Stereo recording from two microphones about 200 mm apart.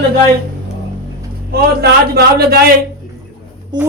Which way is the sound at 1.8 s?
55° right (ahead or behind).